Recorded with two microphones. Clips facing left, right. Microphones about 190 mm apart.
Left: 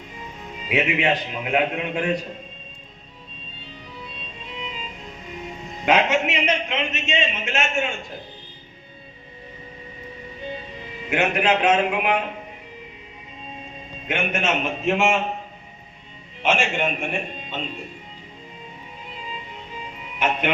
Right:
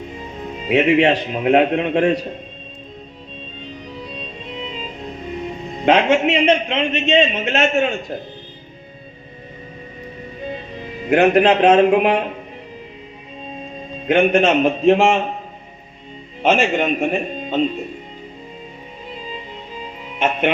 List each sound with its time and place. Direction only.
0.7 s a man's voice: 35° right (ahead or behind)
4.5 s music: 35° right (ahead or behind)
5.8 s a man's voice: 30° right (ahead or behind)
10.8 s a man's voice: 40° right (ahead or behind)
14.1 s a man's voice: 35° right (ahead or behind)
16.4 s a man's voice: 40° right (ahead or behind)